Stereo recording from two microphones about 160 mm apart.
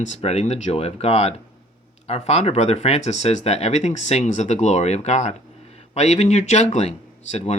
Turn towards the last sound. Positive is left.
turn(degrees=45)  # may be behind; listen again after turning